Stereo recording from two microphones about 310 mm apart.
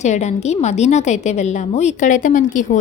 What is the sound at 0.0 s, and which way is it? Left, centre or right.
A woman's voice, left.